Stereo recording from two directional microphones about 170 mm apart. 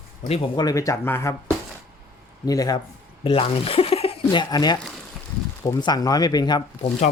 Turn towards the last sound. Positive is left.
turn(degrees=25)  # may be behind; listen again after turning